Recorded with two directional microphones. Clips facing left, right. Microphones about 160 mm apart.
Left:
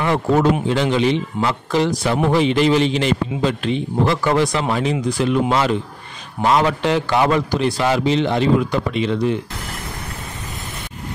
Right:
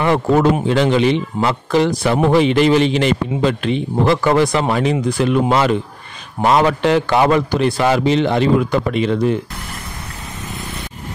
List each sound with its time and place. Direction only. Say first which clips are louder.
0.0 s a man's voice: right 2 dB; 65° right (ahead or behind)